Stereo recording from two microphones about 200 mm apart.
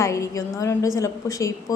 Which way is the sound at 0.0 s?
15° left (ahead or behind).